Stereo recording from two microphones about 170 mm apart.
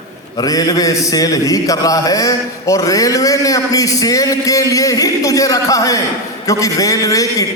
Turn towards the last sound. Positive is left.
turn(degrees=20)  # may be behind; listen again after turning